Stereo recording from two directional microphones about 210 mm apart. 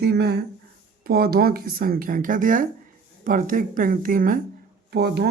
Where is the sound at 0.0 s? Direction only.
50° right (ahead or behind).